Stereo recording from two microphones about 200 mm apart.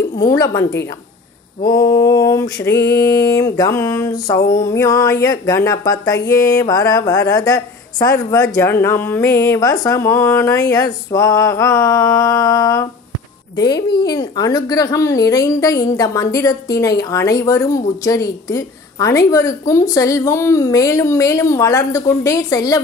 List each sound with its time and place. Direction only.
0.2 s a woman's voice: 15° left (ahead or behind)
1.7 s a woman's voice: 15° left (ahead or behind)
13.9 s a woman's voice: 20° left (ahead or behind)